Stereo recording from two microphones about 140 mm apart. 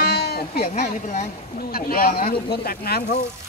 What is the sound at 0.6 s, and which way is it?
Speech, 90° left.